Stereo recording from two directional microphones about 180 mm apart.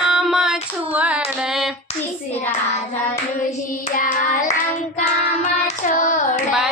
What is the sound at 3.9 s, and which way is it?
Hands, 50° left (ahead or behind).